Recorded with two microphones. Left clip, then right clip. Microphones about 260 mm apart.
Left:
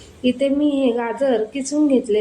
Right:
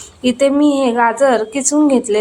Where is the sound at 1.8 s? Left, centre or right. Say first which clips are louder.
Right 1 dB; right.